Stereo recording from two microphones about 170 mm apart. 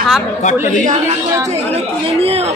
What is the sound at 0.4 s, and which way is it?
Speech, 45° left (ahead or behind).